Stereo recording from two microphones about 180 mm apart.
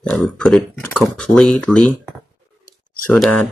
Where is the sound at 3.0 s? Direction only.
5° left (ahead or behind).